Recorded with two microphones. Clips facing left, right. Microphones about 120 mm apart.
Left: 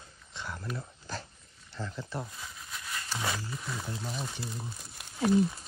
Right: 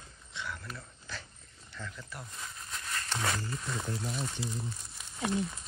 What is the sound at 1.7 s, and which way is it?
Speech, 30° left (ahead or behind).